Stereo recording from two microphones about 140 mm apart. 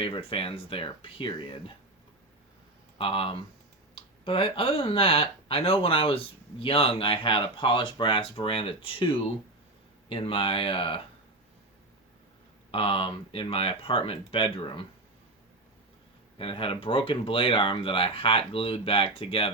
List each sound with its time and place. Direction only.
0.0 s speech: 40° left (ahead or behind)
3.0 s speech: 40° left (ahead or behind)
12.7 s speech: 40° left (ahead or behind)
16.4 s speech: 40° left (ahead or behind)